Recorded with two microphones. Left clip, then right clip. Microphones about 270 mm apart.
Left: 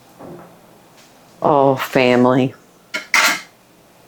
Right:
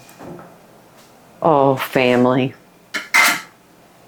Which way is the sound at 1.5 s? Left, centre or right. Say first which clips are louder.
Left 1 dB; left.